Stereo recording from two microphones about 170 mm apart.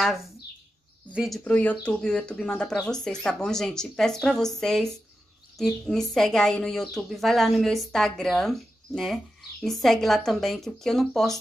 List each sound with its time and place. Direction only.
1.1 s speech: centre (ahead or behind)
1.4 s speech: 10° left (ahead or behind)